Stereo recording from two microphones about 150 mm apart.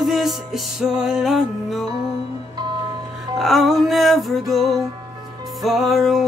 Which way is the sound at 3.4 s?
Centre (ahead or behind).